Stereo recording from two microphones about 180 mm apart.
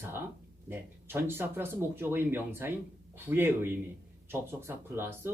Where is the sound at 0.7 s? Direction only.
10° right (ahead or behind).